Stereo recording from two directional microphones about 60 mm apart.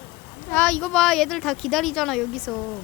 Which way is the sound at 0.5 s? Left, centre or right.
Centre.